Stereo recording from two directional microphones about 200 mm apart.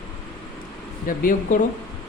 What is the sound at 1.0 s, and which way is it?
Speech, 45° left (ahead or behind).